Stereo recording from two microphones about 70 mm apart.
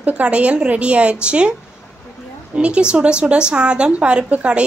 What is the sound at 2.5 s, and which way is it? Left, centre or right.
A woman's voice, centre.